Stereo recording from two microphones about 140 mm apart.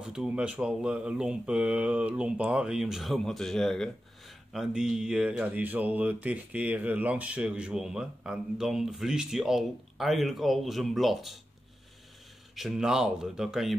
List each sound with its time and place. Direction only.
0.0 s speech: 5° right (ahead or behind)
12.5 s speech: 5° right (ahead or behind)